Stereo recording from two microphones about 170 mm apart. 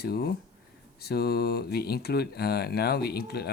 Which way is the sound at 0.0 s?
65° left (ahead or behind).